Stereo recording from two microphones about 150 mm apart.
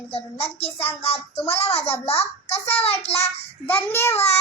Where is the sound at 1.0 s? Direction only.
40° left (ahead or behind).